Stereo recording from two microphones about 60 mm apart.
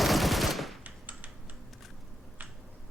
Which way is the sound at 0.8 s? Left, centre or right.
Right.